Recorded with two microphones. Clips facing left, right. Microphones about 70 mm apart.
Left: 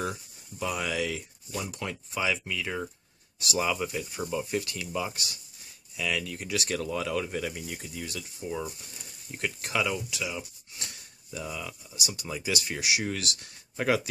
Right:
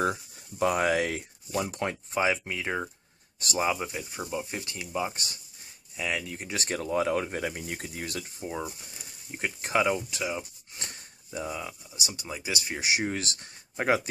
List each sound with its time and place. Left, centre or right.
0.6 s speech: right
8.4 s speech: right